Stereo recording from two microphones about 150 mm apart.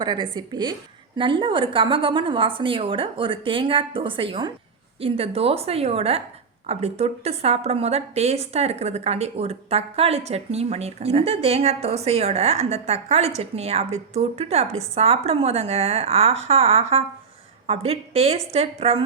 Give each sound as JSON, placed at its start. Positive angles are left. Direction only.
{"t": 0.0, "sound": "a woman's voice", "side_deg": -30}